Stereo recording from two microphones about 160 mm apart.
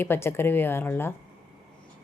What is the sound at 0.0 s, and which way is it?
A woman's voice, 15° left (ahead or behind).